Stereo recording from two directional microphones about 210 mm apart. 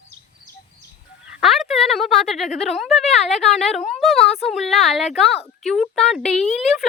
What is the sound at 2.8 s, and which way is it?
Speech, centre (ahead or behind).